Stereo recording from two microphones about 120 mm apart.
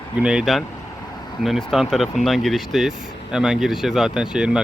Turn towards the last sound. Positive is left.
turn(degrees=-5)  # may be behind; listen again after turning